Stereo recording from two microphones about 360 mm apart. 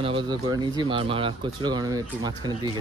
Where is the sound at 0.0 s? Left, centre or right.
Centre.